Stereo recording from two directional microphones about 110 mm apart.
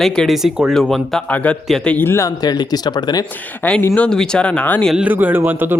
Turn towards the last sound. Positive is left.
turn(degrees=-20)  # may be behind; listen again after turning